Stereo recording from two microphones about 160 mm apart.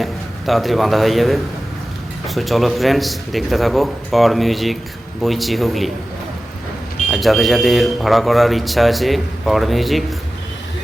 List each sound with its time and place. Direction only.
0.0 s a man's voice: centre (ahead or behind)
7.1 s speech: centre (ahead or behind)